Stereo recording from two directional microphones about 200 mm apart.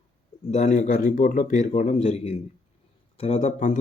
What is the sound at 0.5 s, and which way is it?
Speech, 35° left (ahead or behind).